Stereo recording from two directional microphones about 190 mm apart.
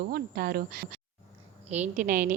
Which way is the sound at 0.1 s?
55° right (ahead or behind).